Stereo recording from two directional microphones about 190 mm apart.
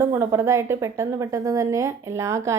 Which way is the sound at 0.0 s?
15° right (ahead or behind).